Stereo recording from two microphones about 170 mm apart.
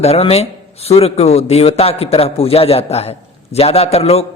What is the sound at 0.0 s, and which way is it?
Speech, 35° left (ahead or behind).